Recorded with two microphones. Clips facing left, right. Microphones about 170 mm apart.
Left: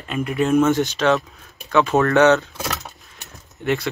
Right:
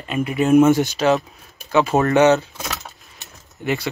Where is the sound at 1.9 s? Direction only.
15° right (ahead or behind).